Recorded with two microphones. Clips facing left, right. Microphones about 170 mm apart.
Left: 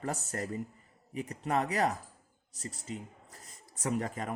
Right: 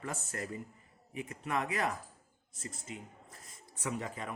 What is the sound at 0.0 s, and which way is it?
Speech, 40° left (ahead or behind).